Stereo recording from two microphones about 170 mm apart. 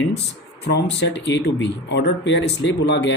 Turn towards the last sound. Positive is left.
turn(degrees=90)